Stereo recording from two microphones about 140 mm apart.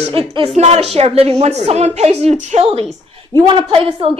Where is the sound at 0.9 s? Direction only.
45° right (ahead or behind).